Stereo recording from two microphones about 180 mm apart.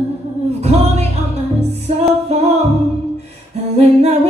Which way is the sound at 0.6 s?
35° right (ahead or behind).